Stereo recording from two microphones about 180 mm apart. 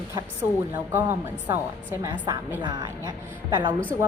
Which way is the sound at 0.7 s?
10° right (ahead or behind).